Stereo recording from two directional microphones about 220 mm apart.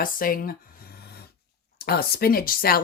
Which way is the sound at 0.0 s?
40° left (ahead or behind).